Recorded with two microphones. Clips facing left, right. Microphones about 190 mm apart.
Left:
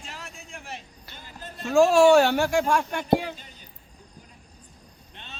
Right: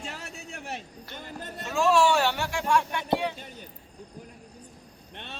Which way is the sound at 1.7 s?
50° left (ahead or behind).